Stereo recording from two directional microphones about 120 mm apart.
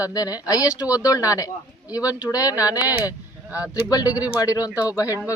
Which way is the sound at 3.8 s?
30° left (ahead or behind).